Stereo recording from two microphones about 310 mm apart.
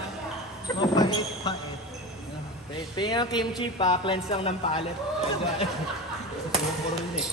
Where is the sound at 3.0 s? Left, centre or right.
Centre.